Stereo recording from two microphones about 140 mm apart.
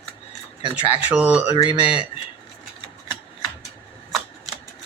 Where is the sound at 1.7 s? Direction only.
40° left (ahead or behind).